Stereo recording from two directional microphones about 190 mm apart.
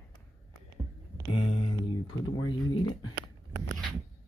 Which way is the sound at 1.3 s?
25° left (ahead or behind).